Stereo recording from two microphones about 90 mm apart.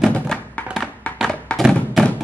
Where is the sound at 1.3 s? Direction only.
10° left (ahead or behind).